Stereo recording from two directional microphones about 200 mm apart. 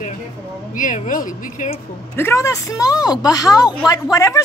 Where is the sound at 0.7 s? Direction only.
40° left (ahead or behind).